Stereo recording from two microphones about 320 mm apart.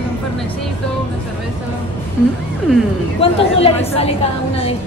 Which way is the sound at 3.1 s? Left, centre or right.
Centre.